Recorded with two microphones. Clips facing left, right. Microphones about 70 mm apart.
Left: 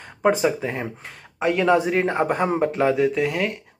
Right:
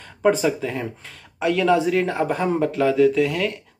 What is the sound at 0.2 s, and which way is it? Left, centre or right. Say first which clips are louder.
Speech: right 1 dB; left.